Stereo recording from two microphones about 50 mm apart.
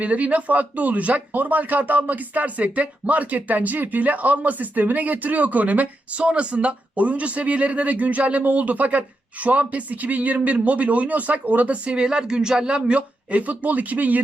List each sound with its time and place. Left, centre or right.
0.0 s speech: right